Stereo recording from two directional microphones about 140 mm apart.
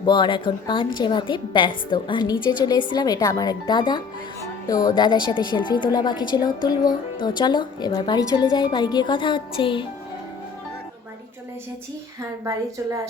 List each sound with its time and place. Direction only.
0.0 s a woman's voice: 35° left (ahead or behind)